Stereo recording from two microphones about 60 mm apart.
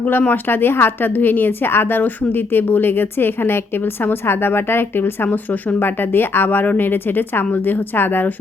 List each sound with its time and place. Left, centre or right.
0.0 s speech: left